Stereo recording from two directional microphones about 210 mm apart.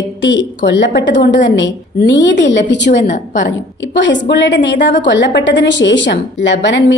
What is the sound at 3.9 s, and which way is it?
A woman's voice, 60° left (ahead or behind).